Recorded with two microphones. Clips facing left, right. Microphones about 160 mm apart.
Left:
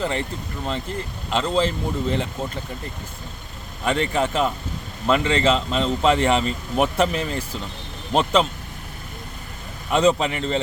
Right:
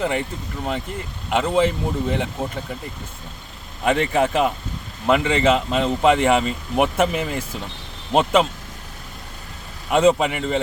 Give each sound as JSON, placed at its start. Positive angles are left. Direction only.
{"t": 0.0, "sound": "speech", "side_deg": -15}
{"t": 3.8, "sound": "speech", "side_deg": -15}
{"t": 9.9, "sound": "speech", "side_deg": -15}